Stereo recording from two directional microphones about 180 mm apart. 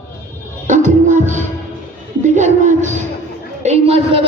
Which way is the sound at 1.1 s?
45° right (ahead or behind).